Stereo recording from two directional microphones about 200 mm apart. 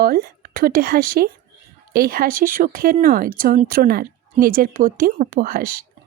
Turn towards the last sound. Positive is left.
turn(degrees=-45)  # may be behind; listen again after turning